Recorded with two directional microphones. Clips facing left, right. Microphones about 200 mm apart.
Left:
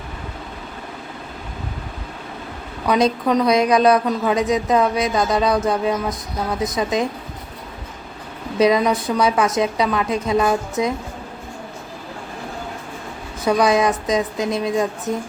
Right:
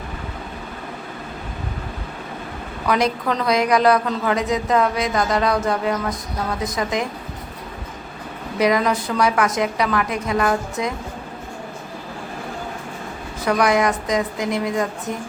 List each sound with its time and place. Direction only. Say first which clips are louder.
2.8 s a woman's voice: left 3 dB; 20° left (ahead or behind)
8.5 s a woman's voice: left 2 dB; 25° left (ahead or behind)
13.4 s a woman's voice: left 2 dB; 20° left (ahead or behind)